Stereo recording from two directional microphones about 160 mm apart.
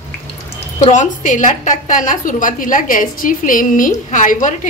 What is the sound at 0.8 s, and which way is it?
A woman's voice, 50° left (ahead or behind).